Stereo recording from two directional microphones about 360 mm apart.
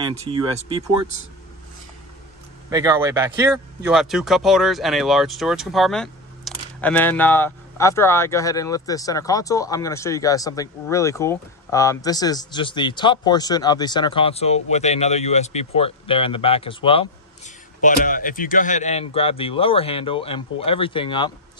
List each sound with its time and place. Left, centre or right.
0.1 s speech: centre
2.7 s speech: centre